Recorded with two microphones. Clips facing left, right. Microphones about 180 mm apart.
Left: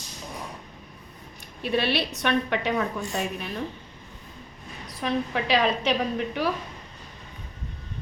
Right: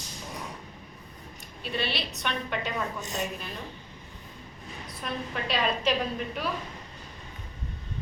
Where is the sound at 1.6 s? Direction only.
60° left (ahead or behind).